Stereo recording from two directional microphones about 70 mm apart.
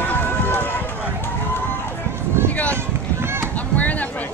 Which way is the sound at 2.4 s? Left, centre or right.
Left.